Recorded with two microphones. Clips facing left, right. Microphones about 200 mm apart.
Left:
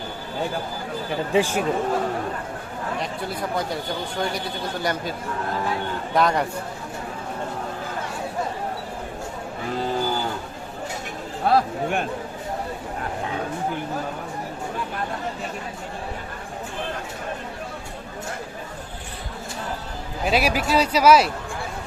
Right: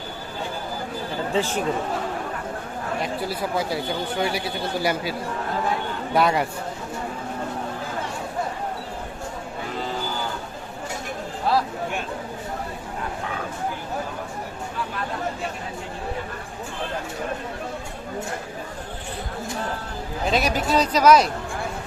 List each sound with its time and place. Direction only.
1.3 s speech: 10° left (ahead or behind)
3.0 s a man's voice: 5° right (ahead or behind)
6.1 s a man's voice: 5° right (ahead or behind)
11.4 s speech: 55° left (ahead or behind)
20.3 s speech: 10° left (ahead or behind)